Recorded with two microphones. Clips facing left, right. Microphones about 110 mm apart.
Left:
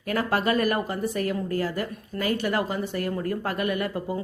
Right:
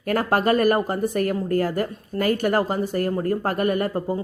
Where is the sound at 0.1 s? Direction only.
45° right (ahead or behind).